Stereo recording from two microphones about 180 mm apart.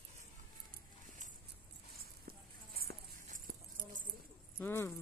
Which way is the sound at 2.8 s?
60° right (ahead or behind).